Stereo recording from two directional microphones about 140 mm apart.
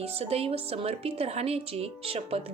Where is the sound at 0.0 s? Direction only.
45° right (ahead or behind).